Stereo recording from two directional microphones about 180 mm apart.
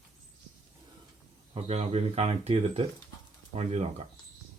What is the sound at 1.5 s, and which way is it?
Speech, 35° right (ahead or behind).